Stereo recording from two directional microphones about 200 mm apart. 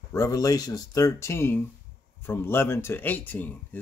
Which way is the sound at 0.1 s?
15° left (ahead or behind).